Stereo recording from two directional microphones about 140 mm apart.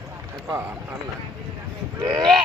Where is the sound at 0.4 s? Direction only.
15° right (ahead or behind).